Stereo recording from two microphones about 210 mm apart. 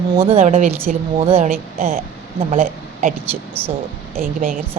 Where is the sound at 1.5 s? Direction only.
45° right (ahead or behind).